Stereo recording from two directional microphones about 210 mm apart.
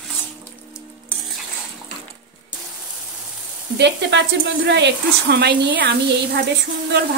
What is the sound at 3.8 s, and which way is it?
Speech, 55° right (ahead or behind).